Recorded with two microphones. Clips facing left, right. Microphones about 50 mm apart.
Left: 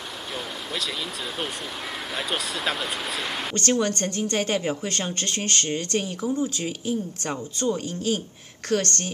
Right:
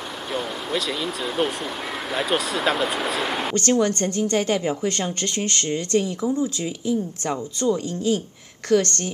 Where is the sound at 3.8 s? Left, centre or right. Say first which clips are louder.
Right 4 dB; left.